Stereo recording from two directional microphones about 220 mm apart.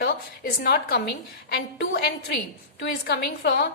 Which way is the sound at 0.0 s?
45° left (ahead or behind).